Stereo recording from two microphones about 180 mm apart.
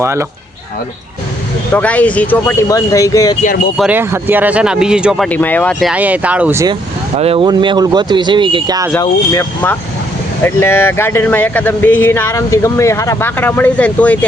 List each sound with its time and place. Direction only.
0.0 s speech: 15° right (ahead or behind)
1.7 s speech: 10° left (ahead or behind)
3.4 s speech: 50° left (ahead or behind)
3.8 s speech: 10° right (ahead or behind); by 5.9 s 10° left (ahead or behind)
5.9 s speech: 10° right (ahead or behind)
7.2 s speech: 30° right (ahead or behind)
9.0 s speech: 15° left (ahead or behind)